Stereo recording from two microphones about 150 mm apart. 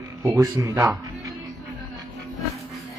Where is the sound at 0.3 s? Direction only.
20° right (ahead or behind).